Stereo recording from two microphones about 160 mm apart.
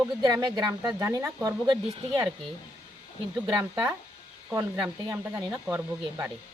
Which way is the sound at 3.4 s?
10° right (ahead or behind).